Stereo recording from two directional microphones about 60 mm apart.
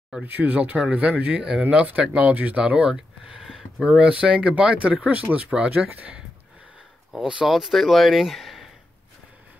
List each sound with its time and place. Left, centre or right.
0.2 s speech: right
7.2 s speech: centre
7.4 s speech: centre